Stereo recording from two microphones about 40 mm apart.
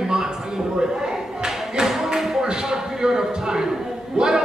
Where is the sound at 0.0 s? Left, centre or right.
Centre.